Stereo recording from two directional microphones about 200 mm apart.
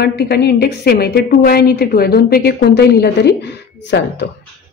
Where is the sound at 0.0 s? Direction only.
55° left (ahead or behind).